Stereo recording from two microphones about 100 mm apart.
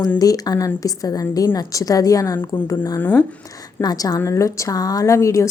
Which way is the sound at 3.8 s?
40° left (ahead or behind).